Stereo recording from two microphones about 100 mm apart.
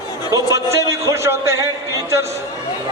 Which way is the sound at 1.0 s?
30° right (ahead or behind).